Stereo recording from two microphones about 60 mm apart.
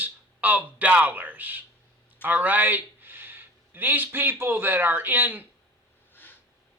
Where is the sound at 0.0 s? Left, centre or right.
Right.